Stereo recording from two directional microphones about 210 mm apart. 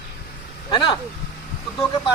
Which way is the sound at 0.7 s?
20° left (ahead or behind).